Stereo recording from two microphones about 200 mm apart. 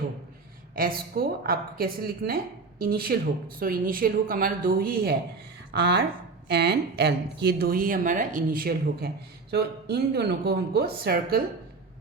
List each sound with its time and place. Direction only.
0.8 s speech: 45° right (ahead or behind)